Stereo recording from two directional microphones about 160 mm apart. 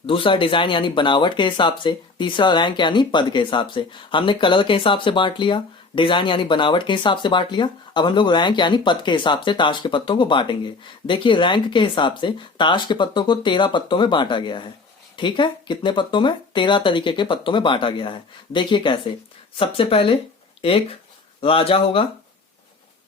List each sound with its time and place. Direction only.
0.0 s speech: 35° left (ahead or behind)